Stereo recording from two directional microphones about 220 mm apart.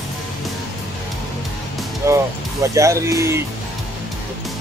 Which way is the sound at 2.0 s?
15° right (ahead or behind).